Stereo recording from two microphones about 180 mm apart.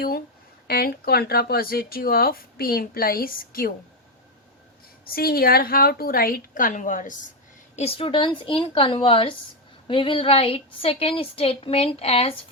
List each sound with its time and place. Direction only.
0.7 s speech: 60° left (ahead or behind)
5.0 s speech: 55° left (ahead or behind)
7.8 s a woman's voice: 35° left (ahead or behind)